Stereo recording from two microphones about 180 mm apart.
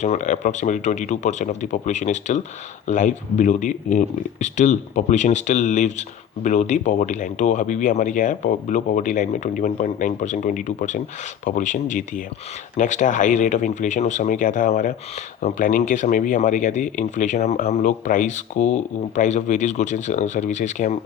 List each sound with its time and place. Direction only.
0.0 s speech: 40° left (ahead or behind)